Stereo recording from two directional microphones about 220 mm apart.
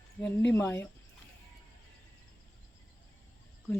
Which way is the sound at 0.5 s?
10° left (ahead or behind).